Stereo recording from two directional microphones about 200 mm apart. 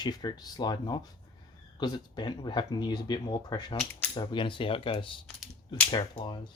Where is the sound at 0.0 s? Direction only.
20° left (ahead or behind).